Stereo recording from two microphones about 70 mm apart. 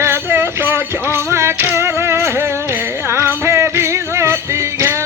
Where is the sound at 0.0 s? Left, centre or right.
Right.